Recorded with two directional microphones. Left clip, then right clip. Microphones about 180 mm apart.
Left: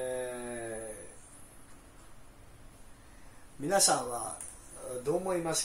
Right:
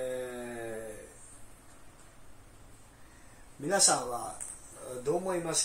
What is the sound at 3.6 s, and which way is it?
Speech, 20° left (ahead or behind).